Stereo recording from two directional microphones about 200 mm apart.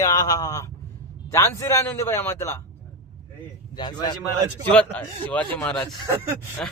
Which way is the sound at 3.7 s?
20° left (ahead or behind).